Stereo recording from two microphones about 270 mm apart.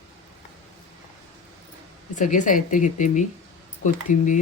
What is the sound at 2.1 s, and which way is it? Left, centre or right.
Speech, left.